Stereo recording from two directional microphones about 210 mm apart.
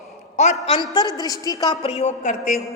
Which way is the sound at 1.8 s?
30° left (ahead or behind).